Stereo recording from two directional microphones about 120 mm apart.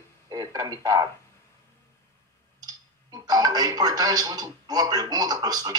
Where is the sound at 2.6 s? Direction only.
35° right (ahead or behind).